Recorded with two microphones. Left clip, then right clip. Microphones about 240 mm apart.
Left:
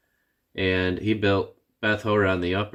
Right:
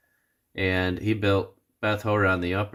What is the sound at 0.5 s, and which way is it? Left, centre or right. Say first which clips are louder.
Speech: left 2 dB; centre.